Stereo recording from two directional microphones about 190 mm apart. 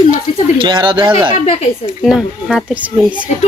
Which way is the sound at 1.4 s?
35° left (ahead or behind).